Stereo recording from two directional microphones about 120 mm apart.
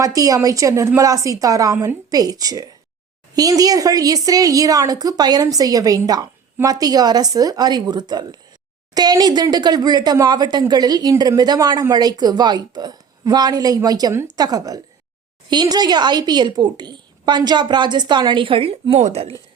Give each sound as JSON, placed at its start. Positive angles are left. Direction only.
{"t": 0.0, "sound": "a woman's voice", "side_deg": -30}